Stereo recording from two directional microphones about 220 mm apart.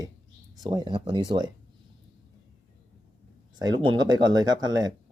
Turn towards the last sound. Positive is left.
turn(degrees=-15)  # may be behind; listen again after turning